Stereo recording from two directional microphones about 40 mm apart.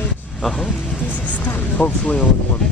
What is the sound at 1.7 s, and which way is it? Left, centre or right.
Speech, left.